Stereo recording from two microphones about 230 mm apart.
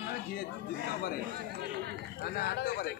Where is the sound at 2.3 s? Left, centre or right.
Left.